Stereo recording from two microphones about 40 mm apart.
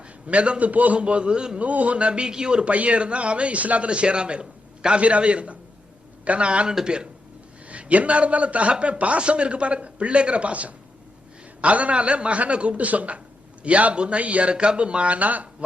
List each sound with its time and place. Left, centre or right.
0.3 s a man's voice: right
0.9 s a man's voice: right
1.5 s a man's voice: right
7.7 s a man's voice: right
14.5 s a man's voice: right